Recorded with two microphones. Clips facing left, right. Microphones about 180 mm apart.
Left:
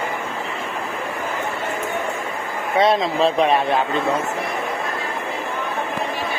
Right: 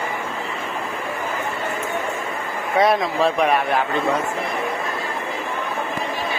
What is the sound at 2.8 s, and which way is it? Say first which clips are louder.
Speech: left 1 dB; 25° left (ahead or behind).